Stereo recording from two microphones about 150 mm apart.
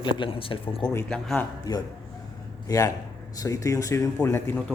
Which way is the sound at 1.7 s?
25° left (ahead or behind).